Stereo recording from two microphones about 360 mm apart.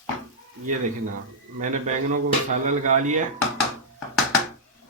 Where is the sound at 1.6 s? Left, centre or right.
Right.